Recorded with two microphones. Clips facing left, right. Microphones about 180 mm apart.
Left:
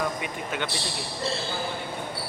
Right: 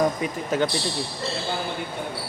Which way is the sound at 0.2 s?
35° right (ahead or behind).